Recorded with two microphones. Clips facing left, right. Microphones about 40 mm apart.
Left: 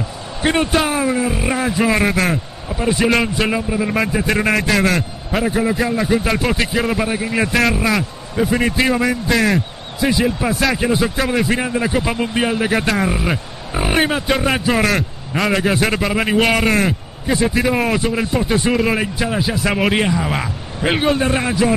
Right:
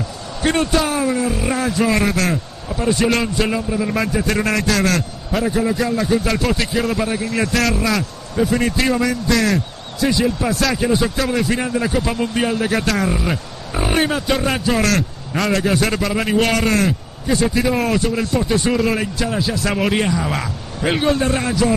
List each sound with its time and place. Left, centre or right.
0.4 s a man's voice: left